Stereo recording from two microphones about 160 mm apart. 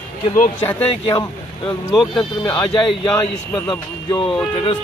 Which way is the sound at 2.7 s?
30° left (ahead or behind).